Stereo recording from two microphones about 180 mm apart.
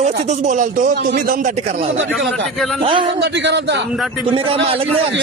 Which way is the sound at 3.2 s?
75° right (ahead or behind).